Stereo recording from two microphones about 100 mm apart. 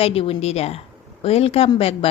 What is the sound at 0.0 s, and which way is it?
A woman's voice, 75° left (ahead or behind).